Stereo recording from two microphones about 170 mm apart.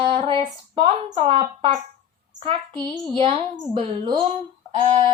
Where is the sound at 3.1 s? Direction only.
30° right (ahead or behind).